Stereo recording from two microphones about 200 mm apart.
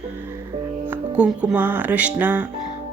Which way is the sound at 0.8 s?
5° right (ahead or behind).